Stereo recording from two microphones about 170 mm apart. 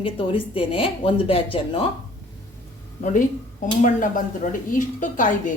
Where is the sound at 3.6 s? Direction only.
50° left (ahead or behind).